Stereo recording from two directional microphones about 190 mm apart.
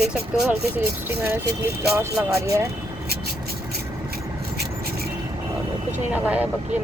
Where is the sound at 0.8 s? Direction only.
10° right (ahead or behind).